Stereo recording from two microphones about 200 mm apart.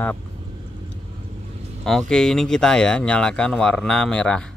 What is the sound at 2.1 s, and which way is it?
Speech, 5° left (ahead or behind).